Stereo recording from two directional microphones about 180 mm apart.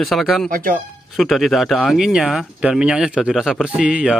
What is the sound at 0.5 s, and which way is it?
Speech, 50° right (ahead or behind).